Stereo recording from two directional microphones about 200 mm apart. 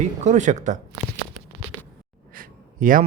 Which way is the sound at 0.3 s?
35° right (ahead or behind).